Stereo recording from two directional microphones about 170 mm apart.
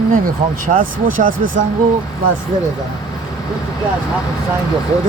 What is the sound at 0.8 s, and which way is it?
Speech, 55° right (ahead or behind).